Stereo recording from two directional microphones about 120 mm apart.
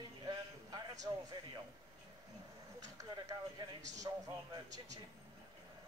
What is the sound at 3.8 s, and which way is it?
Speech, 80° right.